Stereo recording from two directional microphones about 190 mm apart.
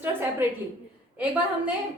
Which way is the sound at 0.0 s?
10° right (ahead or behind).